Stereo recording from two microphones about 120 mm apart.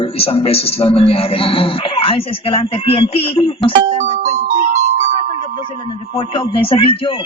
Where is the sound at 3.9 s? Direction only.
65° right (ahead or behind).